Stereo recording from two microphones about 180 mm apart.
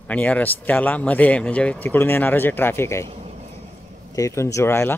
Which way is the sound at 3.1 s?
35° right (ahead or behind).